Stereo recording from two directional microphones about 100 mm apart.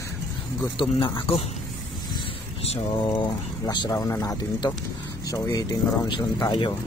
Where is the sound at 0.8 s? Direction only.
60° left (ahead or behind).